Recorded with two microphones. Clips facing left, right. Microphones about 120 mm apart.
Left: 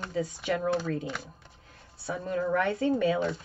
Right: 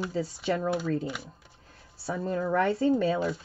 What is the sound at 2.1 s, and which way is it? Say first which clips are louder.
Speech: even; 35° right (ahead or behind).